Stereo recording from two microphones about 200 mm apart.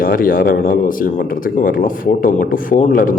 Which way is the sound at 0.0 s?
45° left (ahead or behind).